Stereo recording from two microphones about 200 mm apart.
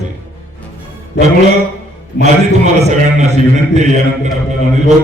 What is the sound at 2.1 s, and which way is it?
Speech, 55° left (ahead or behind).